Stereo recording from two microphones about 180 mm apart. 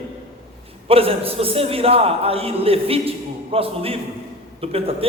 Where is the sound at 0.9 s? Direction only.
30° right (ahead or behind).